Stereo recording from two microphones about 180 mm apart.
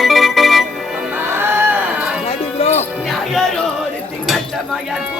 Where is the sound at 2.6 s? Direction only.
35° left (ahead or behind).